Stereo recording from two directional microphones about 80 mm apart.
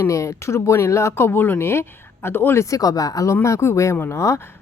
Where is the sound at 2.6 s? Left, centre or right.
Left.